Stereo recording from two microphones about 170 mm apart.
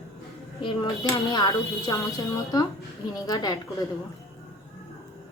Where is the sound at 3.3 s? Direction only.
25° left (ahead or behind).